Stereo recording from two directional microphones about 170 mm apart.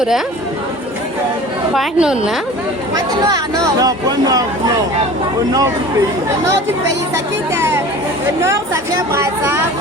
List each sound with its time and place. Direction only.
1.7 s a woman's voice: centre (ahead or behind)
2.9 s speech: 20° right (ahead or behind)
7.5 s chatter: 15° right (ahead or behind)
8.4 s speech: 15° right (ahead or behind)